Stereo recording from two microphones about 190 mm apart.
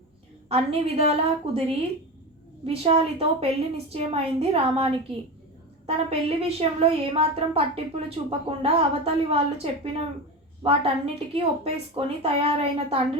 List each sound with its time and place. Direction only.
0.4 s a woman's voice: 30° right (ahead or behind)
2.6 s a woman's voice: 30° right (ahead or behind)
10.6 s a woman's voice: 30° right (ahead or behind)